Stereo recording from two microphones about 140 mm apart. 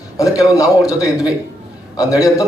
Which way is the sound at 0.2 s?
25° left (ahead or behind).